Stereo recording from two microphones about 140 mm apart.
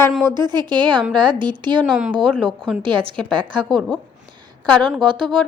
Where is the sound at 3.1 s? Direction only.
5° left (ahead or behind).